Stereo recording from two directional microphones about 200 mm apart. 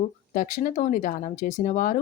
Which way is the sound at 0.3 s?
40° left (ahead or behind).